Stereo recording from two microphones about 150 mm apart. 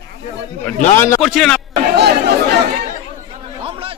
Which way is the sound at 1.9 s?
90° right.